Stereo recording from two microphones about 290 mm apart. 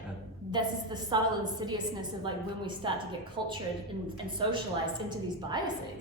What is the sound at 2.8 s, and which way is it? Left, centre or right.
Speech, centre.